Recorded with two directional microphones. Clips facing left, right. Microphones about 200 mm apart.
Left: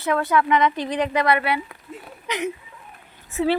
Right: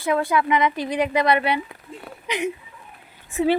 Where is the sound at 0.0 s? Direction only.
10° right (ahead or behind).